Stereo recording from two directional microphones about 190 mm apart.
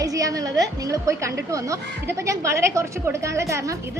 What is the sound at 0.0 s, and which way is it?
A woman's voice, 15° right (ahead or behind).